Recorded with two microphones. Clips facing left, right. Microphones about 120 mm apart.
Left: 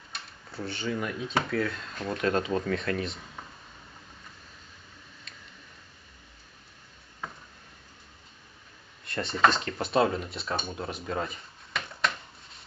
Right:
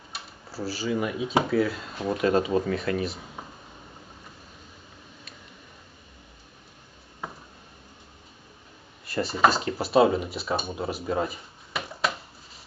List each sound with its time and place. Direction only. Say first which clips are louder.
0.1 s speech: right 3 dB; 5° right (ahead or behind)
9.0 s speech: right 2 dB; 5° right (ahead or behind)